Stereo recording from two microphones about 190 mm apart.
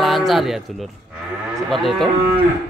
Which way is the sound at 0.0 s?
Centre (ahead or behind).